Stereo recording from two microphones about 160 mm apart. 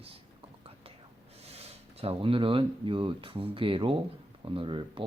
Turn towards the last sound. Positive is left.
turn(degrees=-30)  # may be behind; listen again after turning